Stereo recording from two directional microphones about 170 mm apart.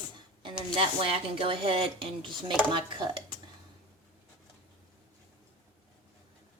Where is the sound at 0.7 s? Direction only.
35° right (ahead or behind).